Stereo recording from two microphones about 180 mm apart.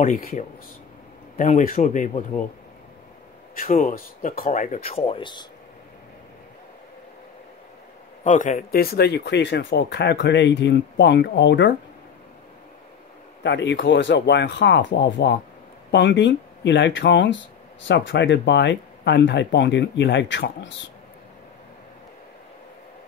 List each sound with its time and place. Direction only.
0.0 s speech: 50° left (ahead or behind)
3.5 s speech: 45° left (ahead or behind); by 5.5 s 25° left (ahead or behind)
8.2 s speech: 45° left (ahead or behind); by 11.7 s 80° left
13.4 s speech: 75° left (ahead or behind)